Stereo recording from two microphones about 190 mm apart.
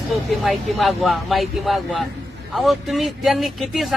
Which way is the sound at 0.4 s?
Centre (ahead or behind).